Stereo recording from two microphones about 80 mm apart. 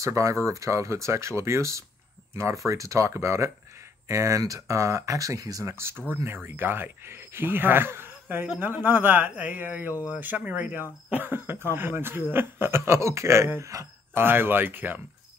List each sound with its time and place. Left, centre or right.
0.0 s speech: right
14.2 s speech: right